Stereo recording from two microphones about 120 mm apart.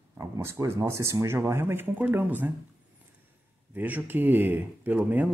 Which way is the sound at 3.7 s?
15° right (ahead or behind).